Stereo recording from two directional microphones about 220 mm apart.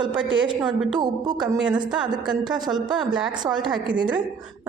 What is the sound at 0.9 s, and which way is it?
Speech, 20° right (ahead or behind).